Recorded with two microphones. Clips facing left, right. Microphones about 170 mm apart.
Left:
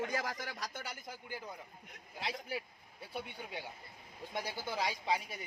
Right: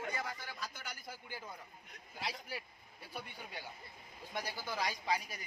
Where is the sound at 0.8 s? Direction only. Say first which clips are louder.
Left 3 dB; 20° left (ahead or behind).